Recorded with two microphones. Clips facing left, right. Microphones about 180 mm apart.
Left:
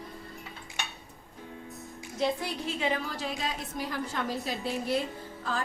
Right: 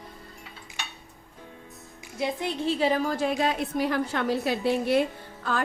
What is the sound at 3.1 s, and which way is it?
A woman's voice, 60° right (ahead or behind).